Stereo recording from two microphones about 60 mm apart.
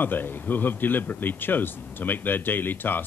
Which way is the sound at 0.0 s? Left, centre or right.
Left.